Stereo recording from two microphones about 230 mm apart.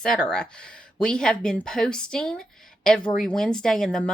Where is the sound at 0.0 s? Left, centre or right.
Centre.